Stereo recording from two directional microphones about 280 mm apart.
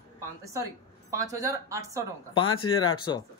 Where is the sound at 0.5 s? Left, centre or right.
Centre.